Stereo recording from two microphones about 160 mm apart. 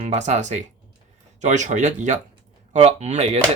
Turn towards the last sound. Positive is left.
turn(degrees=-40)  # may be behind; listen again after turning